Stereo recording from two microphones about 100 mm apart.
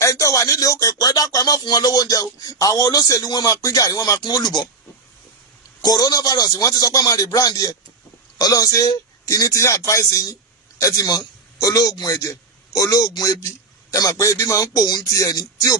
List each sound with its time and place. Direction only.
0.0 s speech: 35° left (ahead or behind)
5.8 s a man's voice: 40° left (ahead or behind)